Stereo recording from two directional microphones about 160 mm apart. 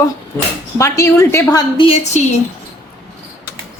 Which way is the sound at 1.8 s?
40° left (ahead or behind).